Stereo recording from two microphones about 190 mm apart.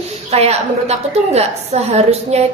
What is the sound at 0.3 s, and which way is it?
A woman's voice, 35° right (ahead or behind).